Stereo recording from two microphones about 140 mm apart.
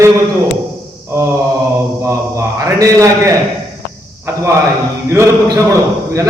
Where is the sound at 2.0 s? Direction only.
20° right (ahead or behind).